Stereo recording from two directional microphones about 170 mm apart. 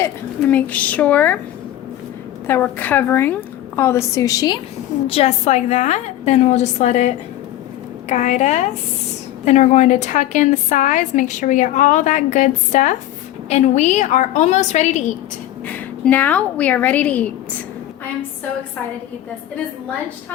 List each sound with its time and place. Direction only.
0.0 s a woman's voice: 10° left (ahead or behind)
2.5 s a woman's voice: 10° left (ahead or behind)
5.0 s a woman's voice: 35° left (ahead or behind)
8.1 s a woman's voice: 45° left (ahead or behind)
15.6 s a woman's voice: 10° left (ahead or behind)